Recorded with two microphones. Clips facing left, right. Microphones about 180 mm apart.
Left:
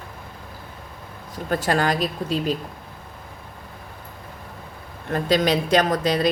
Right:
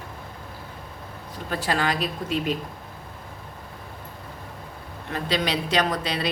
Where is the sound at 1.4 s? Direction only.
45° left (ahead or behind).